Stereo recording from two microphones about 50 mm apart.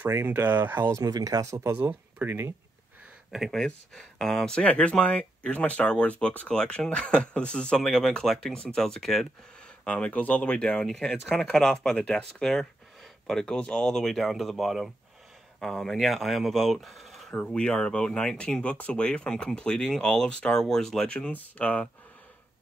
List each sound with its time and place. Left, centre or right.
0.1 s speech: right
1.4 s speech: right
2.2 s speech: right
3.3 s speech: centre
3.5 s speech: centre
4.6 s speech: left
6.5 s speech: centre
9.8 s speech: left; by 14.9 s centre
15.6 s speech: centre
17.5 s speech: centre
21.5 s speech: left